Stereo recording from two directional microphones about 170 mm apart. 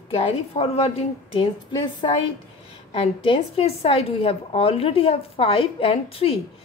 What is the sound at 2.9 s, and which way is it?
A woman's voice, 30° left (ahead or behind).